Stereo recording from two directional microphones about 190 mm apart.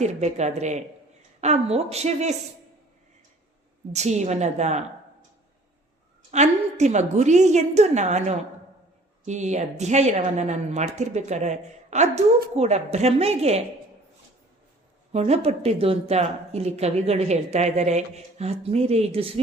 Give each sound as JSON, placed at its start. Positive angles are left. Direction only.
{"t": 0.0, "sound": "a woman's voice", "side_deg": -35}
{"t": 3.9, "sound": "a woman's voice", "side_deg": -35}
{"t": 6.3, "sound": "a woman's voice", "side_deg": -35}
{"t": 15.1, "sound": "a woman's voice", "side_deg": -35}